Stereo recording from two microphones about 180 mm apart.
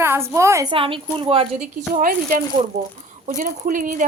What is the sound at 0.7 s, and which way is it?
Speech, 30° right (ahead or behind).